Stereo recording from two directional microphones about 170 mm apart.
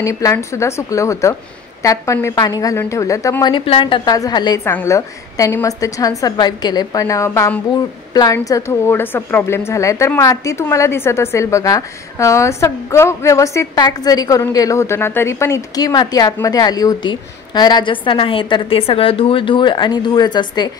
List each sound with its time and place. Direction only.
0.0 s a woman's voice: 15° left (ahead or behind)